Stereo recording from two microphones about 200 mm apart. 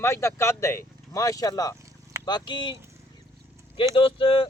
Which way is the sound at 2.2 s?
20° left (ahead or behind).